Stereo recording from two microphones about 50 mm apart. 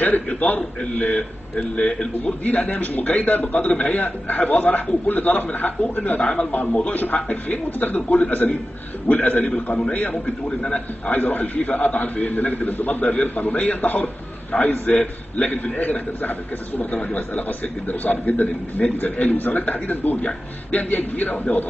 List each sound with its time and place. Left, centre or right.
0.0 s a man's voice: left
13.0 s a man's voice: left